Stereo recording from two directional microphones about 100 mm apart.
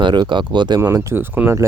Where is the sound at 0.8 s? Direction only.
35° right (ahead or behind).